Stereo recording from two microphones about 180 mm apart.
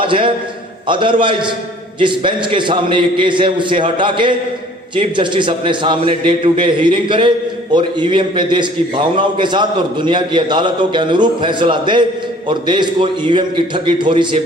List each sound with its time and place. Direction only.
0.0 s a man's voice: 30° right (ahead or behind)